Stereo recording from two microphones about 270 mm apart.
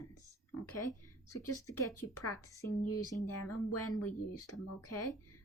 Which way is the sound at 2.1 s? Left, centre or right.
Left.